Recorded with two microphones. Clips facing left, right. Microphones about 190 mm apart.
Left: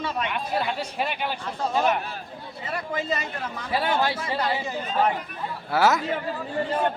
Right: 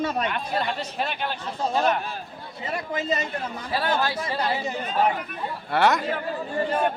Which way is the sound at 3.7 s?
25° left (ahead or behind).